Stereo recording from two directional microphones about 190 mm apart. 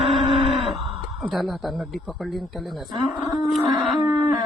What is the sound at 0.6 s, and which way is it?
Speech, centre (ahead or behind).